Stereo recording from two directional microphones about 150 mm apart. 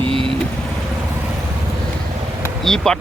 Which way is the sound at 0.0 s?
35° right (ahead or behind).